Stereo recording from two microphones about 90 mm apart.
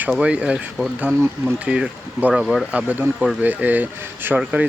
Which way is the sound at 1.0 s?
25° right (ahead or behind).